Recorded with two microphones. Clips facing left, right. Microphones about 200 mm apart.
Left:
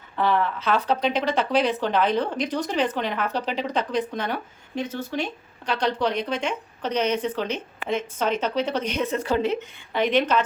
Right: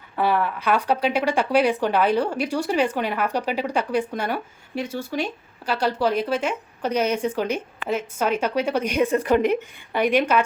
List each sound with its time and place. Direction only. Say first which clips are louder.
0.2 s speech: right 1 dB; 10° right (ahead or behind)
9.1 s speech: right 5 dB; 60° right (ahead or behind)
9.4 s speech: right 3 dB; 10° right (ahead or behind)